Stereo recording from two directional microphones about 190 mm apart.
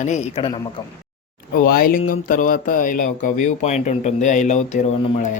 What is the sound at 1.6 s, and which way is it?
Speech, 50° left (ahead or behind).